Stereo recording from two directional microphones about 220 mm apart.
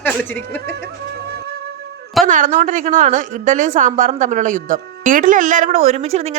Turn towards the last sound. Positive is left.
turn(degrees=-30)  # may be behind; listen again after turning